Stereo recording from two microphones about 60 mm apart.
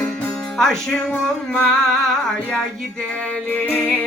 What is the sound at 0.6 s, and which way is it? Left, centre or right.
Music, centre.